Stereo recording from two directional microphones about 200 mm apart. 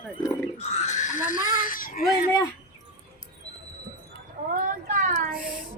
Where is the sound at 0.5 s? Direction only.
35° left (ahead or behind).